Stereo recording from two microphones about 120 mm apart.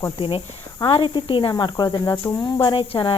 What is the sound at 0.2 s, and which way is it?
Speech, 50° left (ahead or behind).